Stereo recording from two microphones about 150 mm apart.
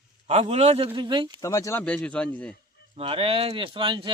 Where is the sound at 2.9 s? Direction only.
40° right (ahead or behind).